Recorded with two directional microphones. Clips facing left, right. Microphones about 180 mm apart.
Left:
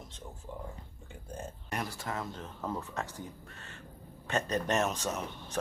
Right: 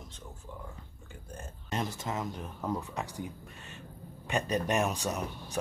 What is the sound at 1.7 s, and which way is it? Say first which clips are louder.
Speech: right 3 dB; 20° right (ahead or behind).